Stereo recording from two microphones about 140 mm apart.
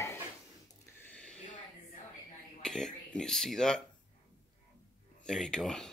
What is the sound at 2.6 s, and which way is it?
Speech, 5° left (ahead or behind).